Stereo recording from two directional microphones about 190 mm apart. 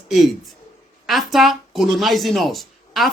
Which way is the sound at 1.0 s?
Centre (ahead or behind).